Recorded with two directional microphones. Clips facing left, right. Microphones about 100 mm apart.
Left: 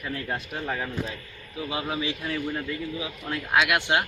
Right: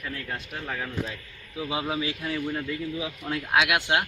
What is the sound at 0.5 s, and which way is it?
Speech, 30° left (ahead or behind).